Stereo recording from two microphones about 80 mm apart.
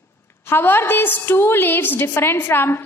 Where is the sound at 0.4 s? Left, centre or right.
Left.